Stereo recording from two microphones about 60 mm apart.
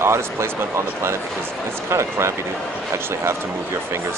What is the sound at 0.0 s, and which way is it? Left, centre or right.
Speech, right.